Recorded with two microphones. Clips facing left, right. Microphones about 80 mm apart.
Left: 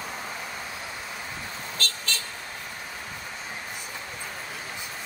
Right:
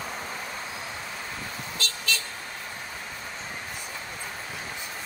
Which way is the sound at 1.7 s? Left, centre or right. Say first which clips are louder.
Right 1 dB; left.